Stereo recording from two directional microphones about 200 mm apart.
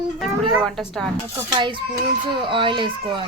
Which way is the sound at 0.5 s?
Centre (ahead or behind).